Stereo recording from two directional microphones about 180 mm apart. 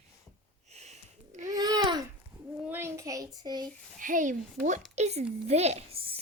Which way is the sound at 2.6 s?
10° right (ahead or behind).